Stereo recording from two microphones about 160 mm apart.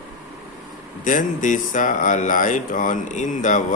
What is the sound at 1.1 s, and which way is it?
Speech, 55° left (ahead or behind).